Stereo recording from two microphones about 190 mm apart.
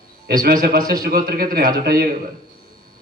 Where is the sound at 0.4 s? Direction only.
55° right (ahead or behind).